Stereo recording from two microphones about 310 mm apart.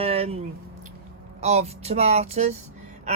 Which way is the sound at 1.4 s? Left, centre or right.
Right.